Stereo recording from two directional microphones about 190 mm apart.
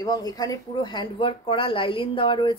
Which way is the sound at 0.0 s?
20° left (ahead or behind).